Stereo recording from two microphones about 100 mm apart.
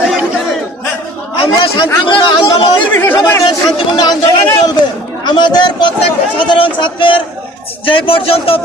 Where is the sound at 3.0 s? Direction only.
20° left (ahead or behind).